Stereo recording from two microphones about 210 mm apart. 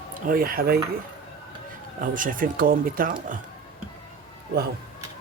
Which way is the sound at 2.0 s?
40° right (ahead or behind).